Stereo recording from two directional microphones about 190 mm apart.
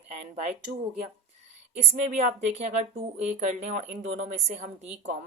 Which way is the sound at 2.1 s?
35° right (ahead or behind).